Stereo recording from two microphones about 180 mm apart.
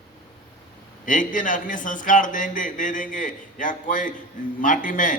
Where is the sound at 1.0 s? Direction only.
45° left (ahead or behind).